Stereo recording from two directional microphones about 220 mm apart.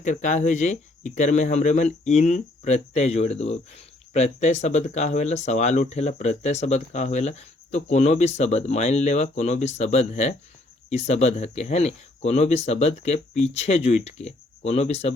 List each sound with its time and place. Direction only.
0.0 s speech: 35° left (ahead or behind)